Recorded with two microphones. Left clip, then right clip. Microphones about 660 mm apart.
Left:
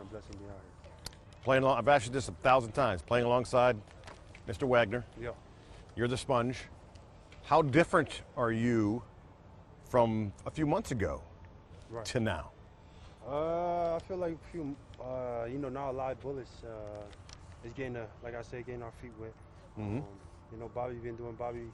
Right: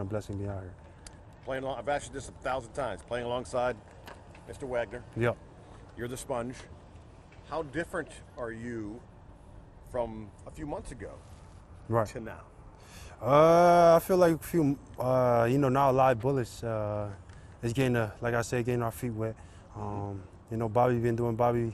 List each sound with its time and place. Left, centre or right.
0.1 s speech: right
1.5 s speech: left
4.0 s a sound: left
6.0 s speech: left
7.4 s speech: left
9.9 s speech: left
13.2 s speech: right
20.6 s speech: right